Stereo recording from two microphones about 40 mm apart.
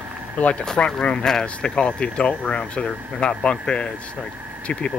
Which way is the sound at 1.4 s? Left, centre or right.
Left.